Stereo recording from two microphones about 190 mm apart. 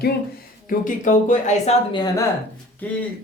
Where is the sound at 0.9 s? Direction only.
45° left (ahead or behind).